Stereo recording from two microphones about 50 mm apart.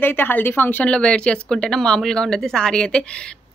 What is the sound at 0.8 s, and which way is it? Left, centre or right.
Speech, left.